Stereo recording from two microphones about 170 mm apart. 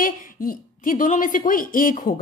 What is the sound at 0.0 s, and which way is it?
A woman's voice, 55° left (ahead or behind).